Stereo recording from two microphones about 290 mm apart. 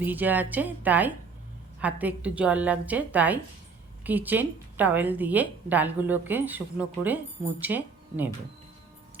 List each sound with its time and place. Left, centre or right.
0.0 s a woman's voice: centre